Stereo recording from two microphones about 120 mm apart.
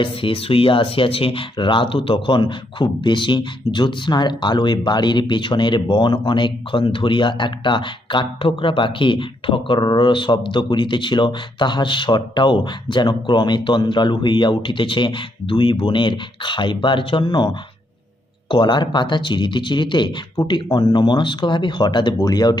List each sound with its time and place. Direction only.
0.0 s speech: 45° left (ahead or behind)